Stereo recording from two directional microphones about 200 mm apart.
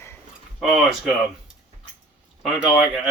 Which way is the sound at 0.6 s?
Centre (ahead or behind).